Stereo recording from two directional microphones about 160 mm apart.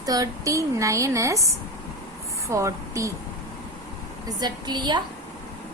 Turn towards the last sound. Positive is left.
turn(degrees=-25)  # may be behind; listen again after turning